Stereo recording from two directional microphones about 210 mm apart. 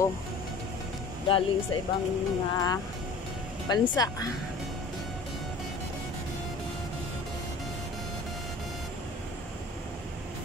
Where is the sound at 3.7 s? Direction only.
20° left (ahead or behind).